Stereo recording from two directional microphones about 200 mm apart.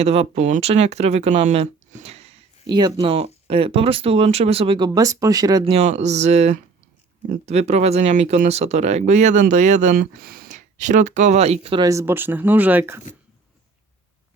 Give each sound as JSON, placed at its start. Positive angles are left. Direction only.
{"t": 0.0, "sound": "speech", "side_deg": -30}
{"t": 5.7, "sound": "speech", "side_deg": -35}